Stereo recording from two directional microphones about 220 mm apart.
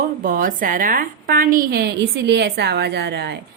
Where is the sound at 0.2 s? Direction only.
40° right (ahead or behind).